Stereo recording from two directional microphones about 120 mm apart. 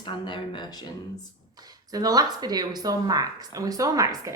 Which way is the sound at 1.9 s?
30° right (ahead or behind).